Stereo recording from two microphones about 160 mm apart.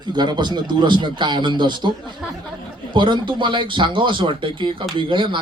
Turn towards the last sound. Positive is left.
turn(degrees=-30)  # may be behind; listen again after turning